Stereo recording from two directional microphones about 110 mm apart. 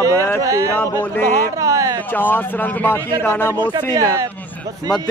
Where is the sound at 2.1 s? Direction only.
15° left (ahead or behind).